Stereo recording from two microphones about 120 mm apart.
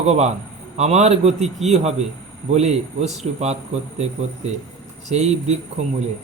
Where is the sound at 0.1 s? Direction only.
65° right (ahead or behind).